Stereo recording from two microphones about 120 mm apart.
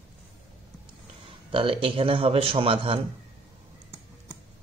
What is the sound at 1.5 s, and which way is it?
Speech, 50° right (ahead or behind).